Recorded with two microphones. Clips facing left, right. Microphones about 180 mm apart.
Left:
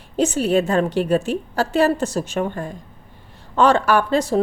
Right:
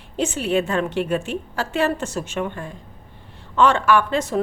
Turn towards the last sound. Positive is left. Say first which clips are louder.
# left 2 dB
turn(degrees=35)  # may be behind; listen again after turning